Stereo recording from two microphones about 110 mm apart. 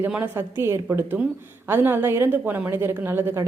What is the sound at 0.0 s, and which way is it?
A woman's voice, 15° right (ahead or behind).